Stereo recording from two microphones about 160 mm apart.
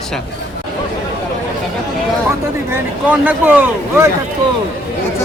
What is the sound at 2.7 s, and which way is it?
Speech, 10° right (ahead or behind).